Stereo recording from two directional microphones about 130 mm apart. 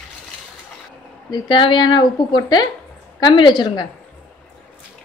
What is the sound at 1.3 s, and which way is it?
Speech, 35° left (ahead or behind).